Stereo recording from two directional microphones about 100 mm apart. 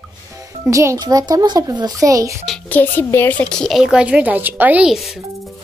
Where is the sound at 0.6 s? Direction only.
30° right (ahead or behind).